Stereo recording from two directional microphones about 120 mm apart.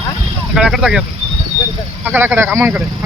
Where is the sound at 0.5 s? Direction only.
5° right (ahead or behind).